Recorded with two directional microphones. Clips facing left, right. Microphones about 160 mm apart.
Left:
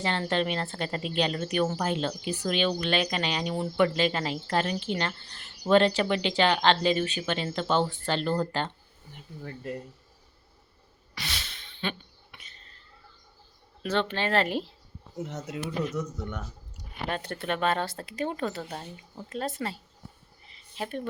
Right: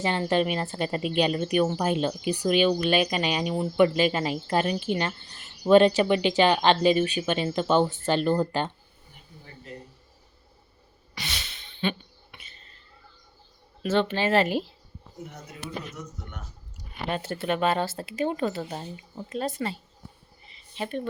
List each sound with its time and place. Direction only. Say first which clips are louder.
0.0 s a woman's voice: right 3 dB; 15° right (ahead or behind)
11.1 s a sound: right 1 dB; centre (ahead or behind)
13.8 s speech: right 4 dB; 5° right (ahead or behind)
15.3 s speech: left 8 dB; 90° left
17.1 s speech: right 4 dB; 5° right (ahead or behind)
20.5 s a sound: right 3 dB; centre (ahead or behind)